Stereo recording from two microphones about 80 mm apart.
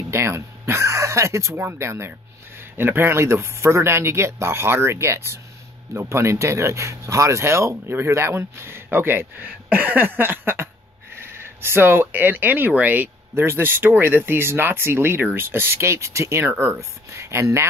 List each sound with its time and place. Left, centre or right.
0.1 s speech: right